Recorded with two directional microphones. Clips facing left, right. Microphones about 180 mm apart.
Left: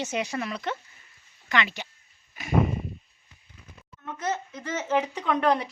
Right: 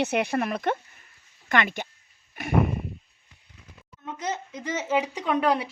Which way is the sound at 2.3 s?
60° right (ahead or behind).